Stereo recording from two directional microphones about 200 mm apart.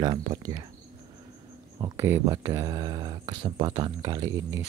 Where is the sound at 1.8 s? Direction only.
15° right (ahead or behind).